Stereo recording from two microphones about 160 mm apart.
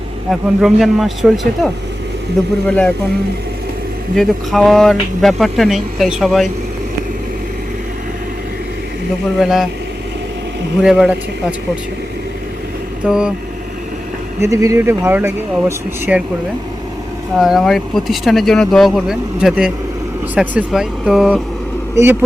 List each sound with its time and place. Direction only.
0.3 s speech: centre (ahead or behind)
4.1 s speech: centre (ahead or behind)
9.4 s speech: centre (ahead or behind)
10.8 s speech: 5° right (ahead or behind)
13.1 s speech: 5° right (ahead or behind)
14.4 s speech: 20° right (ahead or behind)
17.3 s speech: centre (ahead or behind)
21.9 s speech: 15° right (ahead or behind)